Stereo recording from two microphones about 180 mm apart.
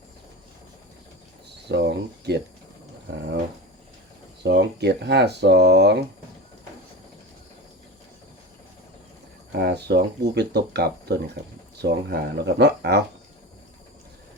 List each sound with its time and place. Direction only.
1.7 s speech: 70° right (ahead or behind)
4.4 s speech: 70° right (ahead or behind)
9.5 s speech: 65° right (ahead or behind)